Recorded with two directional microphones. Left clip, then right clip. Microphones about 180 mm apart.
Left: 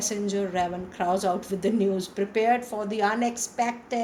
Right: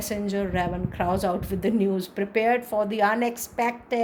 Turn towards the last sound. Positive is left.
turn(degrees=-55)  # may be behind; listen again after turning